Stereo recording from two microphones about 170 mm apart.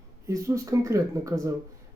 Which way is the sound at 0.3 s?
20° right (ahead or behind).